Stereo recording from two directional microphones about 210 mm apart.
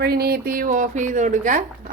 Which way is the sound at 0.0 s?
50° right (ahead or behind).